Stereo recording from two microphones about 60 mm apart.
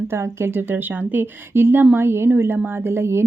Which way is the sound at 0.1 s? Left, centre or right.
Right.